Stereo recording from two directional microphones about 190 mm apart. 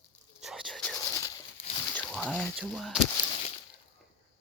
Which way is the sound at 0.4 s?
Centre (ahead or behind).